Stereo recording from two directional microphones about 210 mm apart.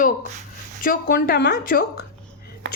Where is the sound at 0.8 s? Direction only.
45° left (ahead or behind).